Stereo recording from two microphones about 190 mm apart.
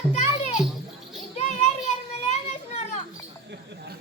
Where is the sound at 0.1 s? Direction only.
35° left (ahead or behind).